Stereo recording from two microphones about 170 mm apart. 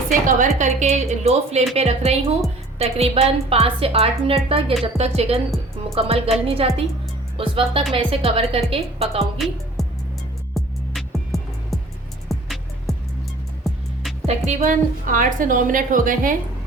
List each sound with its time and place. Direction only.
0.1 s a woman's voice: 50° right (ahead or behind)
9.8 s music: centre (ahead or behind)
14.3 s a woman's voice: 40° right (ahead or behind)